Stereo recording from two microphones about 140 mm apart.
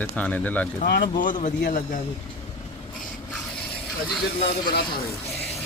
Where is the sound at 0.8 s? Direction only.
90° left.